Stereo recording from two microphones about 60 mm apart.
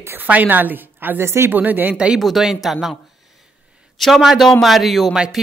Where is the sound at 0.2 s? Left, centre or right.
Right.